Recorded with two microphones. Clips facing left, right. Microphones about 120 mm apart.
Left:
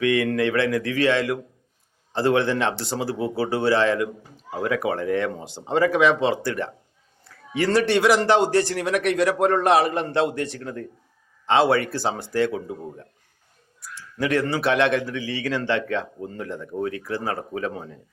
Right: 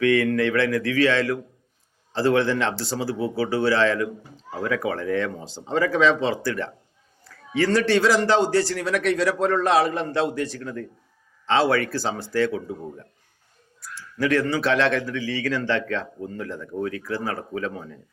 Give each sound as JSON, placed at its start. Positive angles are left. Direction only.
{"t": 0.0, "sound": "a man's voice", "side_deg": 20}
{"t": 14.2, "sound": "a man's voice", "side_deg": 25}